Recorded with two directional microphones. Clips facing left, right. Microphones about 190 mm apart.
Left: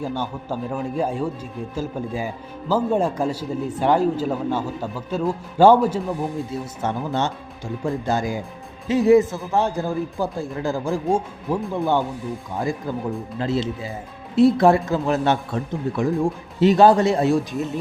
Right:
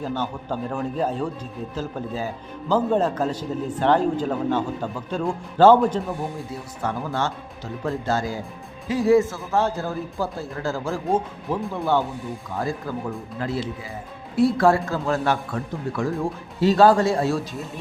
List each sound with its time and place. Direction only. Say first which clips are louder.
0.0 s speech: left 1 dB; 10° left (ahead or behind)
6.8 s a man's voice: left 1 dB; 20° left (ahead or behind)
12.9 s a man's voice: left 3 dB; 20° left (ahead or behind)